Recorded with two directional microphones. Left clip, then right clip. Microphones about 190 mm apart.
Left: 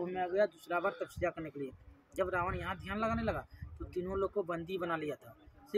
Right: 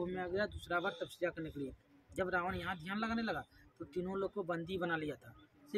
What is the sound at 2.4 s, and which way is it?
Speech, centre (ahead or behind).